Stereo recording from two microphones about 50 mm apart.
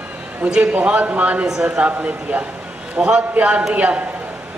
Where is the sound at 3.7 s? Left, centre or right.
Right.